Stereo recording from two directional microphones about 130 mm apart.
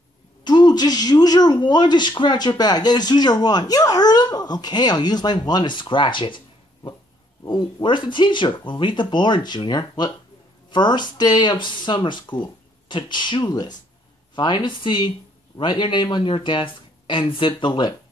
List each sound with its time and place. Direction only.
0.4 s speech: 35° left (ahead or behind)